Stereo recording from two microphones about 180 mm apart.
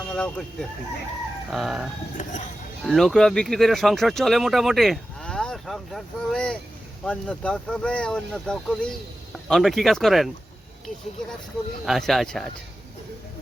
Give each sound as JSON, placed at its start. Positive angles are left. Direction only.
{"t": 0.1, "sound": "speech", "side_deg": 5}
{"t": 1.5, "sound": "speech", "side_deg": 0}
{"t": 2.2, "sound": "speech", "side_deg": 40}
{"t": 2.8, "sound": "speech", "side_deg": 0}
{"t": 11.9, "sound": "speech", "side_deg": 0}